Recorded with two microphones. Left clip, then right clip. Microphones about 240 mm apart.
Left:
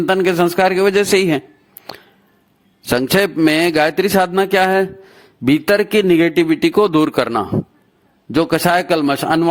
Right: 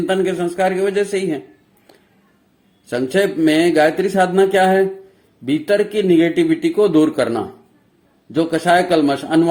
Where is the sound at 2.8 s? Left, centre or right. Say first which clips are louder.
Left 2 dB; left.